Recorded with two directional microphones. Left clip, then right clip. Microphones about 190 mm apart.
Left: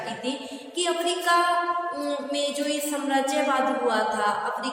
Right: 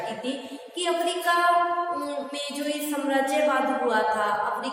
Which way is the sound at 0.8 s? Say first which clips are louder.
Even; centre (ahead or behind).